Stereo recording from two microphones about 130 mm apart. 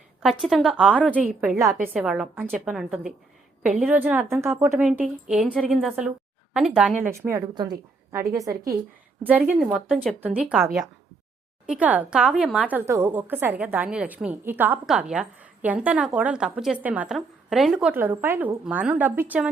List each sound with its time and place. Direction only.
0.2 s a woman's voice: centre (ahead or behind)
0.9 s a woman's voice: 10° left (ahead or behind)
2.0 s a woman's voice: 5° right (ahead or behind)
4.8 s a woman's voice: 5° right (ahead or behind)
7.0 s a woman's voice: 20° right (ahead or behind)
7.5 s a woman's voice: 30° right (ahead or behind)
9.3 s a woman's voice: 15° right (ahead or behind)
9.7 s a woman's voice: centre (ahead or behind)
12.7 s a woman's voice: 20° right (ahead or behind); by 17.9 s 5° right (ahead or behind)
17.9 s a woman's voice: 15° right (ahead or behind)